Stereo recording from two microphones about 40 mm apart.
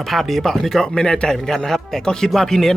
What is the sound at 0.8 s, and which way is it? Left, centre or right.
Speech, centre.